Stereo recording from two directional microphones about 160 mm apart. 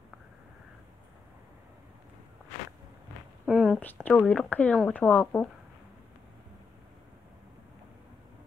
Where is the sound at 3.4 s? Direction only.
5° right (ahead or behind).